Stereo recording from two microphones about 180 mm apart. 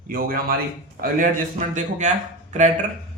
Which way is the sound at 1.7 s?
40° right (ahead or behind).